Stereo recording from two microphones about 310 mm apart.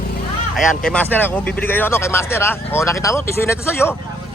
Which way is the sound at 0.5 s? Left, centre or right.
Centre.